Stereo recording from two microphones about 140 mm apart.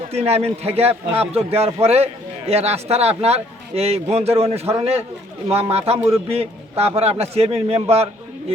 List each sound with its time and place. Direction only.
0.1 s a man's voice: 45° right (ahead or behind)